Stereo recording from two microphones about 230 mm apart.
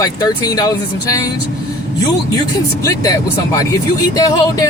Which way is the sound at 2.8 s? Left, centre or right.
Centre.